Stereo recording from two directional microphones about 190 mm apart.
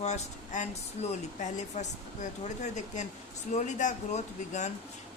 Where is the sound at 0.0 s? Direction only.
40° left (ahead or behind).